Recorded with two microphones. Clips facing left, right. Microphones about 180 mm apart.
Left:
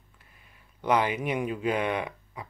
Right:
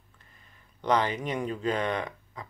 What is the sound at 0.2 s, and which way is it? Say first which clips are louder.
Speech: even; 10° left (ahead or behind).